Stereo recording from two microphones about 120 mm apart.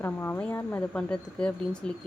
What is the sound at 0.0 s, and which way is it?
Speech, 20° left (ahead or behind).